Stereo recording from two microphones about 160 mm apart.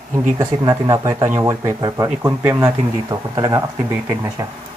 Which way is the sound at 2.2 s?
10° right (ahead or behind).